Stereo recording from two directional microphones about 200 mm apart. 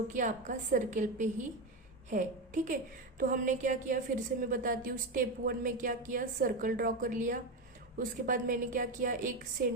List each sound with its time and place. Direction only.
0.1 s a woman's voice: 40° right (ahead or behind)